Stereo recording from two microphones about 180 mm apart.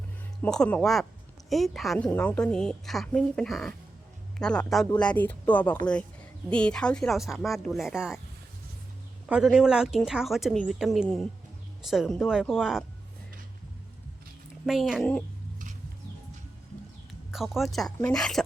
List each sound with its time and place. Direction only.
0.4 s a woman's voice: 5° left (ahead or behind)
9.3 s a woman's voice: 5° right (ahead or behind)
14.7 s a woman's voice: centre (ahead or behind)
17.3 s a woman's voice: centre (ahead or behind)